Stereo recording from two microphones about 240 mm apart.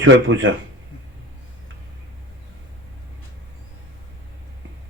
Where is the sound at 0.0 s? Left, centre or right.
Right.